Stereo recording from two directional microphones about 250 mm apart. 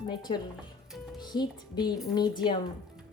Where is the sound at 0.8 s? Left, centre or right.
Centre.